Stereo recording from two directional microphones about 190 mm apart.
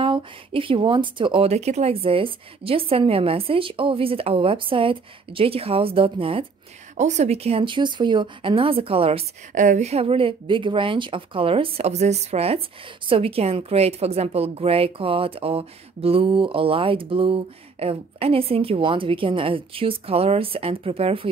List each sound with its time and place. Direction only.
0.0 s speech: 25° right (ahead or behind)
9.5 s speech: 40° right (ahead or behind)